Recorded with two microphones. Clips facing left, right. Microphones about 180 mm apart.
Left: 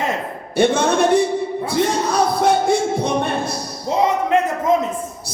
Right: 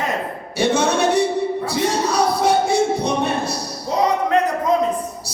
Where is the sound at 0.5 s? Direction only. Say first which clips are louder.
Left 2 dB; 55° left (ahead or behind).